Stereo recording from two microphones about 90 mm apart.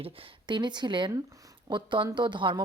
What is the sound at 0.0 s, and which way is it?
A woman's voice, 75° right (ahead or behind).